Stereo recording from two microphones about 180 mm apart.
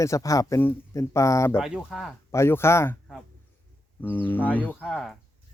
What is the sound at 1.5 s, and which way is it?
Speech, 5° right (ahead or behind).